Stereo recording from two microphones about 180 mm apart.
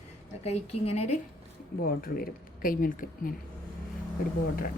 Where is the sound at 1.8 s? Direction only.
55° left (ahead or behind).